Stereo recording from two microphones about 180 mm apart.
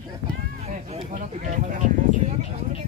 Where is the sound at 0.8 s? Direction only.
40° right (ahead or behind).